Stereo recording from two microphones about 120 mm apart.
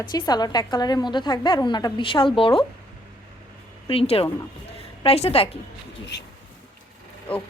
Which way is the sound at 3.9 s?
50° left (ahead or behind).